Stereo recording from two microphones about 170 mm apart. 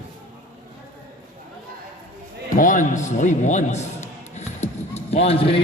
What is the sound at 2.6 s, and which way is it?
A man's voice, 50° left (ahead or behind).